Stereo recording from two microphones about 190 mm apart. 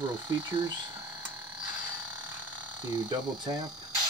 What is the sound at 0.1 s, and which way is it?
Speech, 25° right (ahead or behind).